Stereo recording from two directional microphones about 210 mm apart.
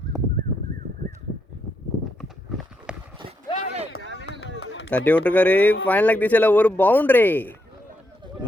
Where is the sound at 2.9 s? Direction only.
5° right (ahead or behind).